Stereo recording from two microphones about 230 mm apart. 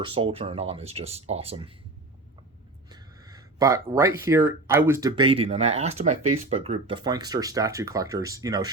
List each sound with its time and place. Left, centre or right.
0.0 s speech: right
2.9 s speech: centre